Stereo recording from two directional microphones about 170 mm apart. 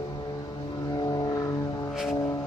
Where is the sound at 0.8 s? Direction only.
25° left (ahead or behind).